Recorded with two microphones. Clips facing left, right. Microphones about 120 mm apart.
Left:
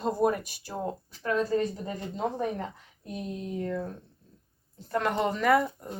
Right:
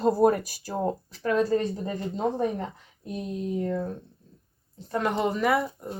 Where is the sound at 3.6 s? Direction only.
20° right (ahead or behind).